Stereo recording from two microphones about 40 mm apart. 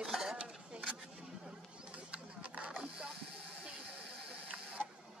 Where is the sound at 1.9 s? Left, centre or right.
Right.